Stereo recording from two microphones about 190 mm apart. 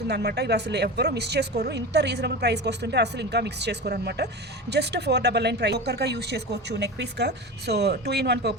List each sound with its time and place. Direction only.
0.1 s speech: 60° right (ahead or behind)